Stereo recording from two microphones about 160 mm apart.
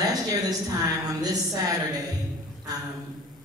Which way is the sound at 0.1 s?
25° right (ahead or behind).